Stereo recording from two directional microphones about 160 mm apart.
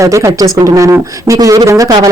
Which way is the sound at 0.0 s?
20° right (ahead or behind).